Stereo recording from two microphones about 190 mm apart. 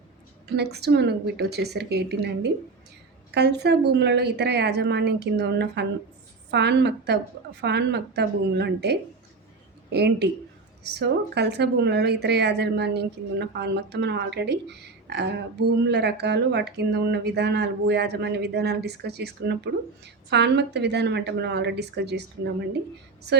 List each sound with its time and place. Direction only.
0.4 s speech: 60° right (ahead or behind)